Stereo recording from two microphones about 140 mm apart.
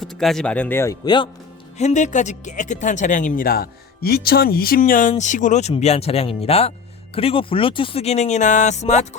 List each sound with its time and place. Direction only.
0.0 s speech: centre (ahead or behind)
1.0 s speech: 35° left (ahead or behind)
1.8 s speech: 60° left (ahead or behind)
5.7 s speech: 45° left (ahead or behind)